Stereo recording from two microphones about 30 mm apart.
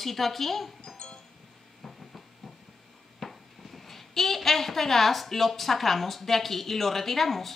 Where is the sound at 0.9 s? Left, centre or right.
Left.